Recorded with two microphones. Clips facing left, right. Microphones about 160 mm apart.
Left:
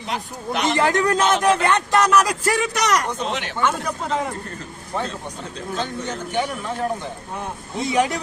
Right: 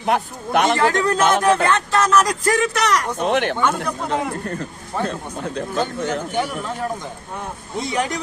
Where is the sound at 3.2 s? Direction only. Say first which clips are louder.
Right 7 dB; 55° right (ahead or behind).